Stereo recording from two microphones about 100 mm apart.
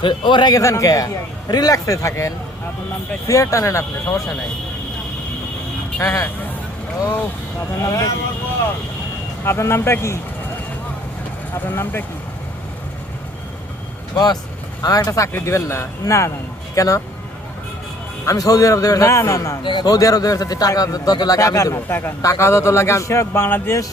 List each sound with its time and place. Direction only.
0.0 s a man's voice: 50° left (ahead or behind)
0.5 s speech: 30° left (ahead or behind)
6.0 s speech: 30° left (ahead or behind)
7.8 s speech: 35° left (ahead or behind)
9.4 s a man's voice: 25° left (ahead or behind)
11.5 s a man's voice: 25° left (ahead or behind)
14.8 s speech: 40° left (ahead or behind)
18.3 s speech: 35° left (ahead or behind)
19.6 s a man's voice: 50° left (ahead or behind); by 23.8 s 25° left (ahead or behind)